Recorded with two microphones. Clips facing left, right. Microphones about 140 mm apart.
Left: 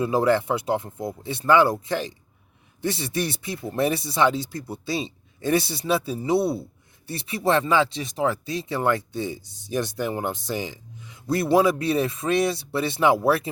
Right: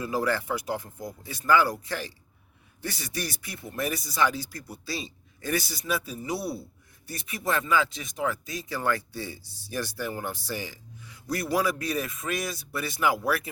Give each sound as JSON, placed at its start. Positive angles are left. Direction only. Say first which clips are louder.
{"t": 0.0, "sound": "speech", "louder": "left 7 dB", "side_deg": 25}